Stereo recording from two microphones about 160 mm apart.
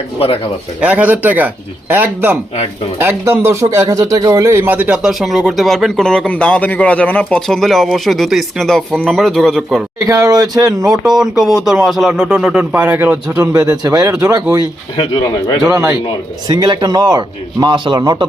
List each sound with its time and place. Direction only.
0.2 s speech: 35° left (ahead or behind)
0.8 s a man's voice: 10° right (ahead or behind)
10.1 s speech: 20° right (ahead or behind)
11.0 s a man's voice: 5° right (ahead or behind)
13.4 s speech: 20° right (ahead or behind)
14.9 s speech: 30° left (ahead or behind)
16.5 s speech: 25° right (ahead or behind)